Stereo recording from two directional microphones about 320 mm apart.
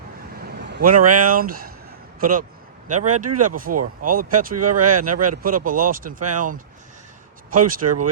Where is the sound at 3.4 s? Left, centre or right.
Right.